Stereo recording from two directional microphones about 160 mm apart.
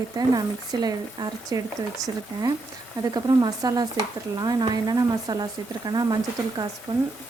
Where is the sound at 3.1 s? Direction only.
25° right (ahead or behind).